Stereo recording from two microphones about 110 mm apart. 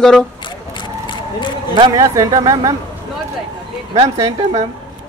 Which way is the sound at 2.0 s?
30° right (ahead or behind).